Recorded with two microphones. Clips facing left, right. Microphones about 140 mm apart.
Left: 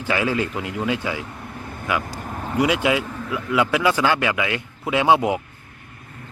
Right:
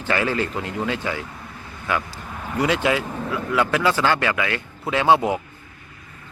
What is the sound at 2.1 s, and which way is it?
Vehicle, 40° left (ahead or behind).